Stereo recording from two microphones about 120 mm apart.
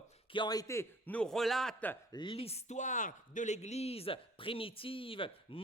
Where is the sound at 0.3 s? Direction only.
35° left (ahead or behind).